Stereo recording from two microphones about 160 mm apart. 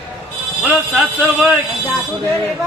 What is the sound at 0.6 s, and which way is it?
Speech, 10° right (ahead or behind).